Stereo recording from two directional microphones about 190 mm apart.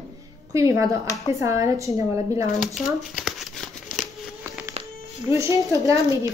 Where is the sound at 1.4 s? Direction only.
15° right (ahead or behind).